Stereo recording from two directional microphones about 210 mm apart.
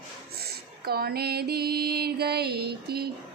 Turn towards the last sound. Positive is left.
turn(degrees=-50)  # may be behind; listen again after turning